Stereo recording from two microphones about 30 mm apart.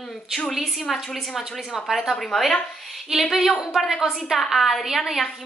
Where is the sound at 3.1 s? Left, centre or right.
Centre.